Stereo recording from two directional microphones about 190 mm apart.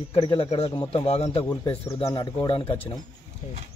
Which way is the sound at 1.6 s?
20° left (ahead or behind).